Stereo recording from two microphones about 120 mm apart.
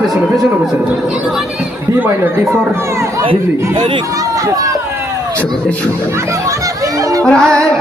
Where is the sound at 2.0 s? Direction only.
15° right (ahead or behind).